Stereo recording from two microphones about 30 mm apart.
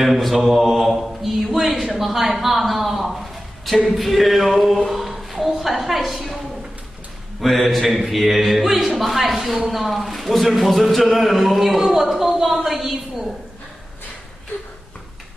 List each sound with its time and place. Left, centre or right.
0.0 s mantra: centre
0.7 s a sound: centre
7.3 s a man's voice: centre